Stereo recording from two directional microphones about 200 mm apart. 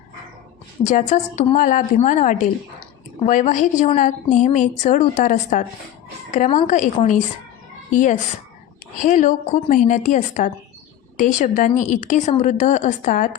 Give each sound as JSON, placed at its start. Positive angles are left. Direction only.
{"t": 0.9, "sound": "a woman's voice", "side_deg": 35}